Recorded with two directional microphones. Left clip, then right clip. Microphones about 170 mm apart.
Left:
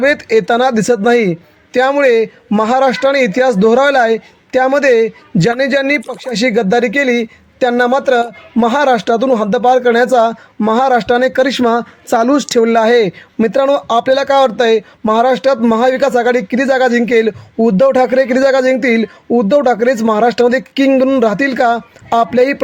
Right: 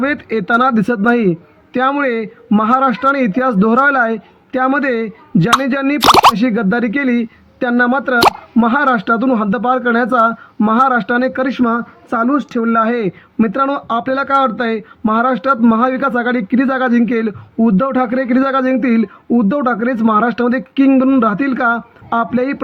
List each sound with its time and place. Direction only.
0.0 s speech: 45° left (ahead or behind)